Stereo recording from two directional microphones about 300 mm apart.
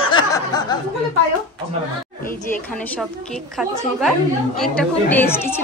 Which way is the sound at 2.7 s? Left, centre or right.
Centre.